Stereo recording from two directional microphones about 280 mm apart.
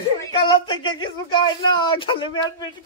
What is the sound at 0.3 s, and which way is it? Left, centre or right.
Speech, centre.